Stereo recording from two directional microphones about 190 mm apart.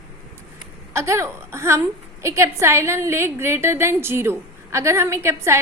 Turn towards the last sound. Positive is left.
turn(degrees=-15)  # may be behind; listen again after turning